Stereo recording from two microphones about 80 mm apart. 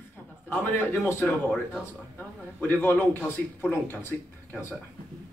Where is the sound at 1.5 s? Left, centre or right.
Centre.